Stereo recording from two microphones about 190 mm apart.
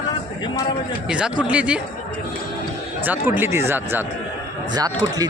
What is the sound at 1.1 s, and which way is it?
Speech, 5° right (ahead or behind).